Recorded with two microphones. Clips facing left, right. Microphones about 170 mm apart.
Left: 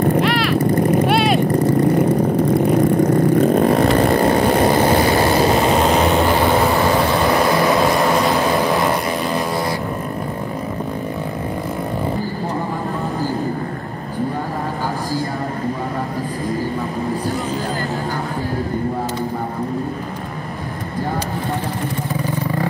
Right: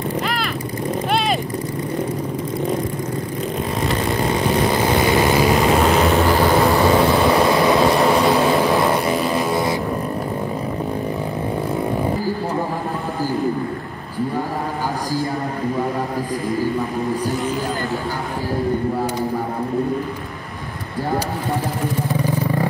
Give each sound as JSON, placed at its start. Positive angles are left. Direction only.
{"t": 0.2, "sound": "vehicle", "side_deg": 0}
{"t": 3.3, "sound": "vehicle", "side_deg": 65}
{"t": 7.4, "sound": "vehicle", "side_deg": 0}